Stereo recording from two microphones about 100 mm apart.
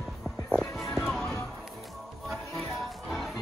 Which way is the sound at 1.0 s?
5° left (ahead or behind).